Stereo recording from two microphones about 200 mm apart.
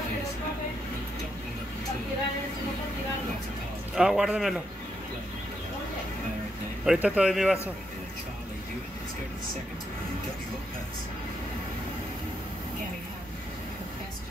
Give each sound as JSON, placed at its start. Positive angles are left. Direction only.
{"t": 3.9, "sound": "a man's voice", "side_deg": 0}
{"t": 6.8, "sound": "a man's voice", "side_deg": -5}